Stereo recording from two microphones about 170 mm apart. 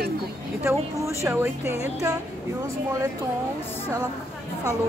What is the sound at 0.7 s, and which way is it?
A woman's voice, 15° right (ahead or behind).